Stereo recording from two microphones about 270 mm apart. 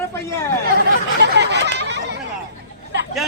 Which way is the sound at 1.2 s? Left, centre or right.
Right.